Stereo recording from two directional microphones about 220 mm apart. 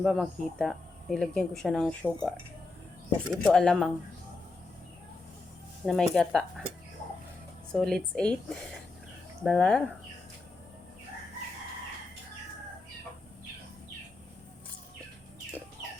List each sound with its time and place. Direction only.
0.0 s speech: centre (ahead or behind)
3.4 s speech: 5° left (ahead or behind)
5.8 s speech: centre (ahead or behind)
7.7 s speech: 5° left (ahead or behind)